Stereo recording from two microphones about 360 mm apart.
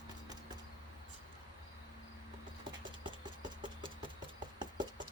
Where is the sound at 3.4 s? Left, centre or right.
Centre.